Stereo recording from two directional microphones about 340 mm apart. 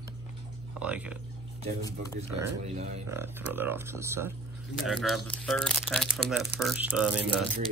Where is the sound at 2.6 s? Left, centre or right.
Centre.